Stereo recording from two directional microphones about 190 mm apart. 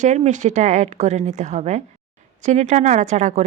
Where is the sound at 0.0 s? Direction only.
40° right (ahead or behind).